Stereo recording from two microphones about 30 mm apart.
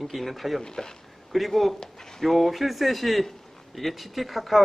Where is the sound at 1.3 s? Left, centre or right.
Centre.